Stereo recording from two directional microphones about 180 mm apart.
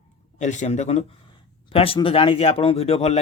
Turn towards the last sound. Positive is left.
turn(degrees=35)  # may be behind; listen again after turning